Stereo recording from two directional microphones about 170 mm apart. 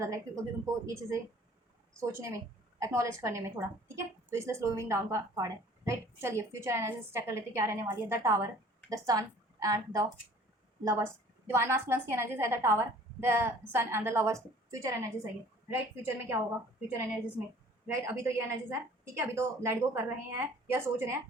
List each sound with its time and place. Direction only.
0.0 s a woman's voice: 20° right (ahead or behind)
17.8 s a woman's voice: 15° right (ahead or behind)